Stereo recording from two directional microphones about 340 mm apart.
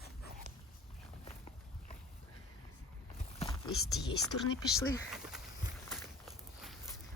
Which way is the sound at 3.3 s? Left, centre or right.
Centre.